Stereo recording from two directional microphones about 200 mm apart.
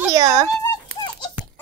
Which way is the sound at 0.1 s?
15° right (ahead or behind).